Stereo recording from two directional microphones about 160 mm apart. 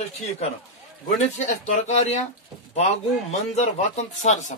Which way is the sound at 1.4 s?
50° left (ahead or behind).